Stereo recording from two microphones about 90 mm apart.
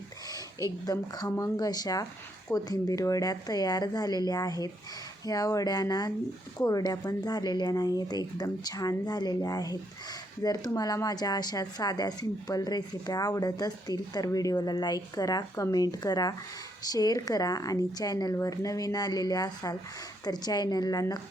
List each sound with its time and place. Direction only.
0.9 s speech: 45° left (ahead or behind)